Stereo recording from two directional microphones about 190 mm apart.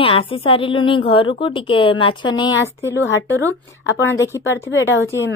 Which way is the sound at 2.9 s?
70° left (ahead or behind).